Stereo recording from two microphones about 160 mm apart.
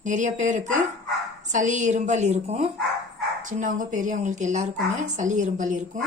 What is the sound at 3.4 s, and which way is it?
A woman's voice, 55° right (ahead or behind).